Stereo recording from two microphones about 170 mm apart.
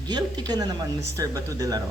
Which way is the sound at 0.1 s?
25° right (ahead or behind).